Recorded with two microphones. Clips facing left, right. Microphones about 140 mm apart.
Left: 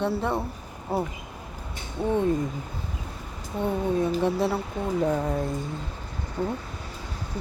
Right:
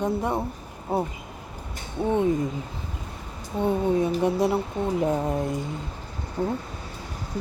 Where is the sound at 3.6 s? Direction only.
20° right (ahead or behind).